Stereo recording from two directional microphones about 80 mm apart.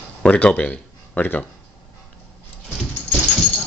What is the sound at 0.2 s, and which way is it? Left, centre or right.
Speech, centre.